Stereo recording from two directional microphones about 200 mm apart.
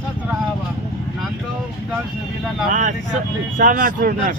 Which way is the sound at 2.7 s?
40° right (ahead or behind).